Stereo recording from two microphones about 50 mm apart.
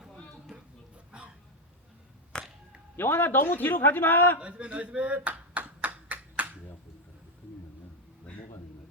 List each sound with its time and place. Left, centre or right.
2.3 s a sound: centre
2.9 s a man's voice: left
4.4 s speech: right
5.5 s clapping: right